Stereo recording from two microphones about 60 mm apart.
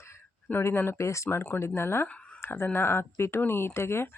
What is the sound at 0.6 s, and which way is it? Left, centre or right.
Speech, left.